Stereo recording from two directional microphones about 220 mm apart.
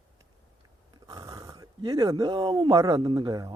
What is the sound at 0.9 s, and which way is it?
Speech, 15° right (ahead or behind).